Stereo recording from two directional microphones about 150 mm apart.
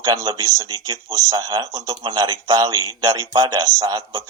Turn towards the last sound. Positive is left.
turn(degrees=-25)  # may be behind; listen again after turning